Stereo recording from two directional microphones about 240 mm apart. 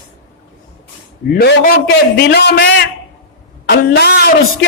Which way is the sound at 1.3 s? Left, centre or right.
Left.